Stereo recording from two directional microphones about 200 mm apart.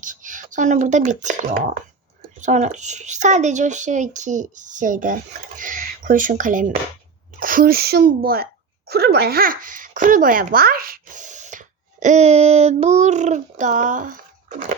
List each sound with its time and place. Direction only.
0.0 s a child's voice: 40° right (ahead or behind)